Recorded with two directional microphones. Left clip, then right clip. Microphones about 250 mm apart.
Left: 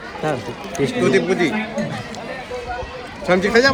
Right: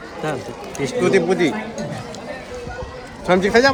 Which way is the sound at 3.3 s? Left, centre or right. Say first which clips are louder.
Even; right.